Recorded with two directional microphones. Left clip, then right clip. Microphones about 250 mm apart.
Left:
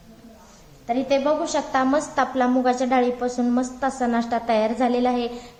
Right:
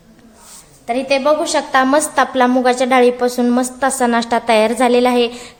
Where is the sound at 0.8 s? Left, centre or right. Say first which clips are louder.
Right 6 dB; right.